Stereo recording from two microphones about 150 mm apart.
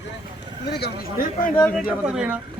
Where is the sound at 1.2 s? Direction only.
65° left (ahead or behind).